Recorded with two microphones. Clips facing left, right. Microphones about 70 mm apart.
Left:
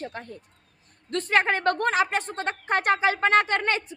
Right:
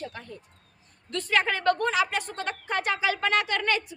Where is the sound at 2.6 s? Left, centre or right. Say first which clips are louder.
Left 5 dB; left.